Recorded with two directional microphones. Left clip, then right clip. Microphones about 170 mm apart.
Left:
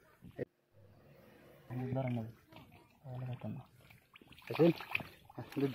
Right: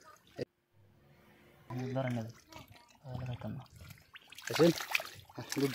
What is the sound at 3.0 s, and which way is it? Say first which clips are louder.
Pour: right 3 dB; 20° right (ahead or behind).